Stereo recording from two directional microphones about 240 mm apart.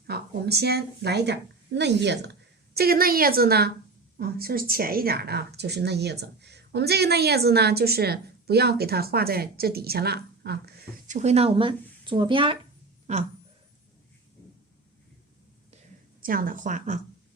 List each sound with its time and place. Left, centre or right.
0.1 s a woman's voice: right
11.2 s speech: right
16.2 s a woman's voice: right